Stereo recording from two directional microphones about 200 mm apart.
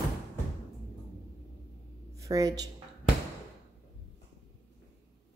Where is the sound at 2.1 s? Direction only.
15° right (ahead or behind).